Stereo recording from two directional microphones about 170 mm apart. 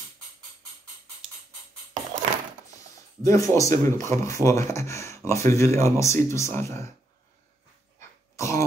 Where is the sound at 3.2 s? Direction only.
20° left (ahead or behind).